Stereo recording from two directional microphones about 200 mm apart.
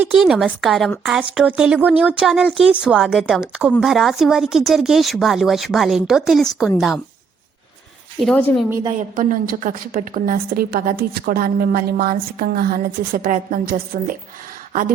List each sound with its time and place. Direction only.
0.0 s a woman's voice: centre (ahead or behind)
8.2 s a woman's voice: 5° left (ahead or behind)
9.0 s a woman's voice: 40° right (ahead or behind)
14.7 s a sound: 40° right (ahead or behind)